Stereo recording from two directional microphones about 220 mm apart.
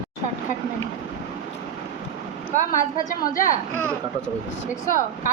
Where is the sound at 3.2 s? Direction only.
40° left (ahead or behind).